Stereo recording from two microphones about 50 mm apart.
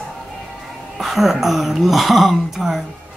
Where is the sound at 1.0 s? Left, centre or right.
Centre.